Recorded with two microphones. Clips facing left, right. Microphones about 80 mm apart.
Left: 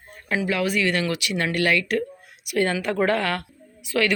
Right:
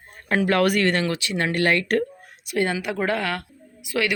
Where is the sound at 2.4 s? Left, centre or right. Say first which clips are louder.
Left 1 dB; centre.